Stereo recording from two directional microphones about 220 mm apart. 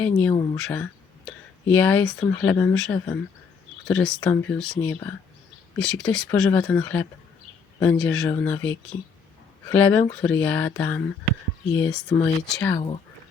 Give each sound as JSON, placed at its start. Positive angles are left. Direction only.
{"t": 0.0, "sound": "speech", "side_deg": 5}
{"t": 12.7, "sound": "speech", "side_deg": 20}